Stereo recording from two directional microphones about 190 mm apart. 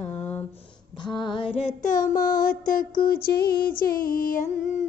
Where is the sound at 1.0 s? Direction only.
25° left (ahead or behind); by 2.1 s 45° left (ahead or behind).